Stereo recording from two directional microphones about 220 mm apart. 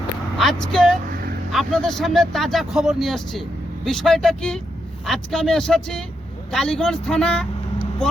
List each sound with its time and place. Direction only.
0.3 s speech: centre (ahead or behind)
1.1 s vehicle: 45° right (ahead or behind)
1.5 s speech: centre (ahead or behind)